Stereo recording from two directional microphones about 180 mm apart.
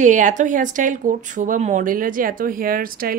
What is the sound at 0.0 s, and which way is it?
A woman's voice, 45° right (ahead or behind).